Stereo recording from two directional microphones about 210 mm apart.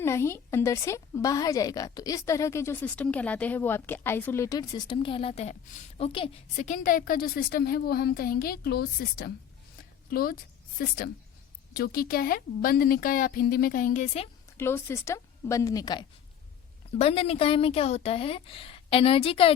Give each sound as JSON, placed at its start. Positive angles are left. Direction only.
{"t": 0.0, "sound": "a woman's voice", "side_deg": 10}
{"t": 14.6, "sound": "a woman's voice", "side_deg": 10}